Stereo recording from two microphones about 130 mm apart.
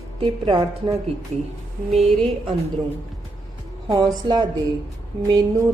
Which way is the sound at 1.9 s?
55° right (ahead or behind).